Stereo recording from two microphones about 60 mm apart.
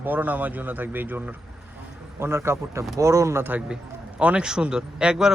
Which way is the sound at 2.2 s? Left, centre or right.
Right.